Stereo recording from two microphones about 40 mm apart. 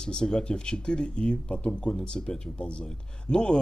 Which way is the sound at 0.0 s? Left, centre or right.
Centre.